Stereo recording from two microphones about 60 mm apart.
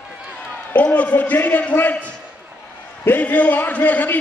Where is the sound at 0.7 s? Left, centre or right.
Left.